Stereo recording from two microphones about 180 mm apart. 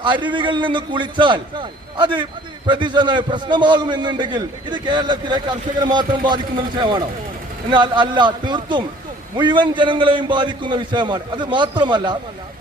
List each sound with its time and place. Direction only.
0.0 s a man's voice: 25° right (ahead or behind)